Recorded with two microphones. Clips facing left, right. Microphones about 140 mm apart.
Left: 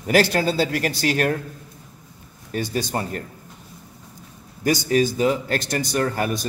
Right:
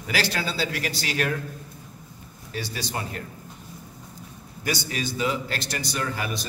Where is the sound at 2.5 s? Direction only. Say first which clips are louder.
Left 7 dB; 50° left (ahead or behind).